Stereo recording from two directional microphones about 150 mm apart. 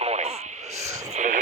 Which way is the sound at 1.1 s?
55° right (ahead or behind).